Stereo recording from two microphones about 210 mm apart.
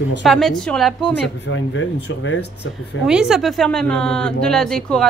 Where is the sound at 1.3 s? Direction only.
60° left (ahead or behind).